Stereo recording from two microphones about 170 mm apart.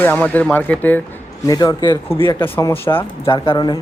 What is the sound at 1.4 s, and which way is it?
Speech, 20° left (ahead or behind).